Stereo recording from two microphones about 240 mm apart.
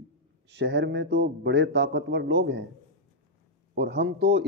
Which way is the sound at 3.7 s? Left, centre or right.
Right.